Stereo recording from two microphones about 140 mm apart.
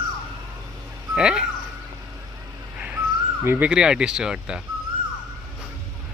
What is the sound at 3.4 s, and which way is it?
Speech, 10° right (ahead or behind).